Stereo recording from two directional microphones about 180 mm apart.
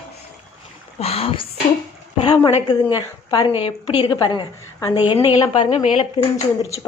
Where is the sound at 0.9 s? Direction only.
35° left (ahead or behind).